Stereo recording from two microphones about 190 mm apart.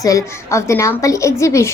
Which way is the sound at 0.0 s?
15° left (ahead or behind).